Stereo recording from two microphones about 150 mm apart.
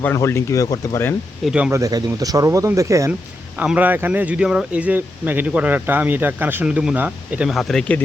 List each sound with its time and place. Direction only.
0.0 s speech: 15° left (ahead or behind)
1.5 s speech: 5° right (ahead or behind)
1.7 s speech: 25° right (ahead or behind)
3.6 s speech: 10° right (ahead or behind); by 8.0 s 5° left (ahead or behind)